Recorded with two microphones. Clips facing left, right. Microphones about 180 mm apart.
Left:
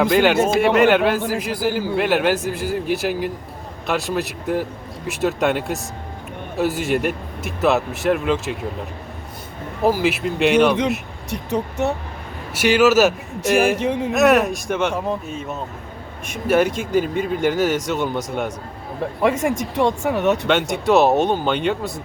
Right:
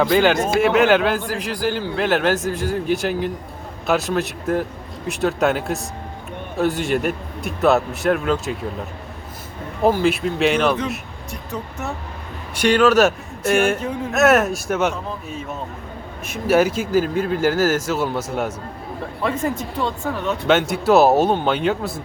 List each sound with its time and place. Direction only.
0.0 s a man's voice: centre (ahead or behind)
9.8 s a man's voice: 5° left (ahead or behind)
12.5 s a man's voice: 5° left (ahead or behind)
13.7 s speech: 85° left
14.1 s a man's voice: centre (ahead or behind)
19.3 s speech: 85° left
20.5 s a man's voice: 5° right (ahead or behind)